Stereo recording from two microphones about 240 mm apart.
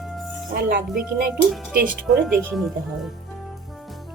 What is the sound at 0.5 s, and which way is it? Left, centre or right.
Speech, right.